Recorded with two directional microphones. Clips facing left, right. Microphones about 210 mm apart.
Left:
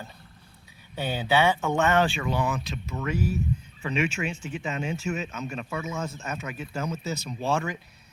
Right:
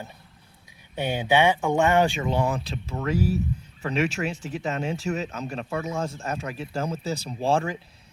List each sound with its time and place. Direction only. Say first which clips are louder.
0.9 s speech: right 2 dB; 15° right (ahead or behind); by 7.8 s 30° right (ahead or behind)